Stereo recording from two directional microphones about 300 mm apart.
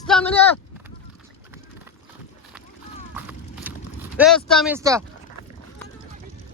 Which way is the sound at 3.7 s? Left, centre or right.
Centre.